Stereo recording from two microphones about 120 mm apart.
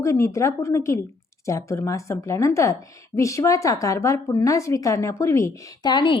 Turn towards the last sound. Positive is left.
turn(degrees=40)  # may be behind; listen again after turning